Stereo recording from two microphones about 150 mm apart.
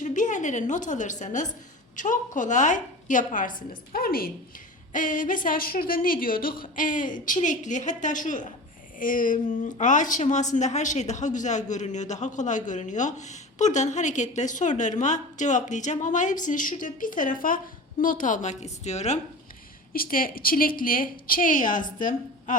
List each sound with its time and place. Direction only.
0.0 s a woman's voice: 55° left (ahead or behind); by 4.3 s 80° left
4.9 s a man's voice: 60° left (ahead or behind)
19.9 s a woman's voice: 75° left (ahead or behind)